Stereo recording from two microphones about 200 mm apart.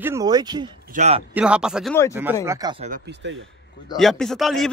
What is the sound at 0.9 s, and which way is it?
Speech, 35° right (ahead or behind).